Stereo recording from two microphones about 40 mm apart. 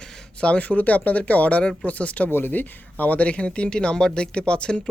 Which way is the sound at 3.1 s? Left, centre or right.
Left.